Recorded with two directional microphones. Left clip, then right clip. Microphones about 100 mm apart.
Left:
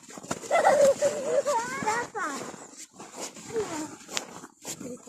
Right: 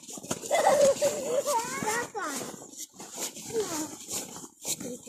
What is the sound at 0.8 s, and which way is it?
Dog, 30° left (ahead or behind).